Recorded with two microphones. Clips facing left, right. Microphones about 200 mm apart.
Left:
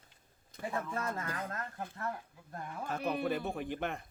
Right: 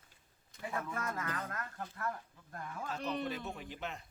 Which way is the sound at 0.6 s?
30° left (ahead or behind).